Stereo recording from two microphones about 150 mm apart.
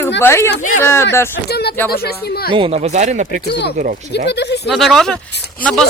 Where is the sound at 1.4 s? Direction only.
90° left.